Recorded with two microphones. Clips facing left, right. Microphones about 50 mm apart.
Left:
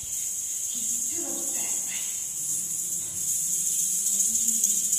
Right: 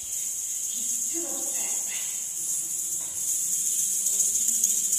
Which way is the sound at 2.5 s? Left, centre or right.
Centre.